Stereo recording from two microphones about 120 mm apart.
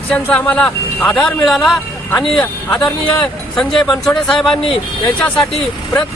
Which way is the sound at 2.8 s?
5° left (ahead or behind).